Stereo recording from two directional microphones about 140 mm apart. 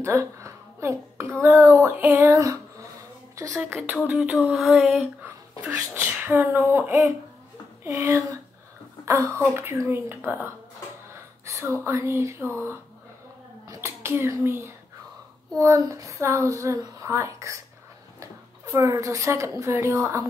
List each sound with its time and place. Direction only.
0.0 s a sound: 20° right (ahead or behind)
1.4 s female singing: 15° right (ahead or behind)
4.1 s a sound: 10° right (ahead or behind)
5.2 s speech: 15° right (ahead or behind)
7.8 s female singing: 15° right (ahead or behind)
9.0 s speech: 20° right (ahead or behind)
9.5 s female singing: 20° right (ahead or behind)
11.4 s speech: 20° right (ahead or behind)
13.7 s a child's voice: 20° right (ahead or behind)